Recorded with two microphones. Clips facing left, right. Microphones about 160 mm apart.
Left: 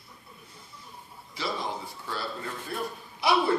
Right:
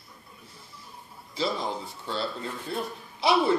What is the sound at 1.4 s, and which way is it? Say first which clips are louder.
Speech: right 3 dB; 25° right (ahead or behind).